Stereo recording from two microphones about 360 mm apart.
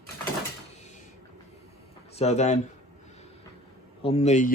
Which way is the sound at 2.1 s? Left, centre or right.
Centre.